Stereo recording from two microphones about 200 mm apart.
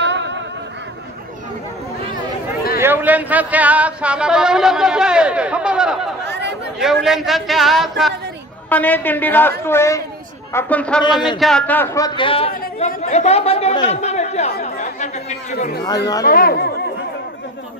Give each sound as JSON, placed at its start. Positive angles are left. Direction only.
{"t": 0.0, "sound": "a sound", "side_deg": -60}
{"t": 2.8, "sound": "speech", "side_deg": -10}
{"t": 6.2, "sound": "chatter", "side_deg": -60}
{"t": 6.8, "sound": "a woman's voice", "side_deg": 0}
{"t": 11.1, "sound": "speech", "side_deg": 20}
{"t": 11.3, "sound": "speech", "side_deg": 0}
{"t": 15.8, "sound": "speech", "side_deg": 20}
{"t": 16.3, "sound": "speech", "side_deg": 45}